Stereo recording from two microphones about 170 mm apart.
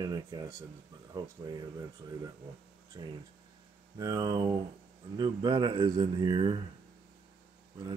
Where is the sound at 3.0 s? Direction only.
25° right (ahead or behind).